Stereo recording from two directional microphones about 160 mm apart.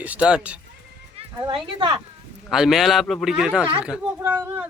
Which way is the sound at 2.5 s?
Centre (ahead or behind).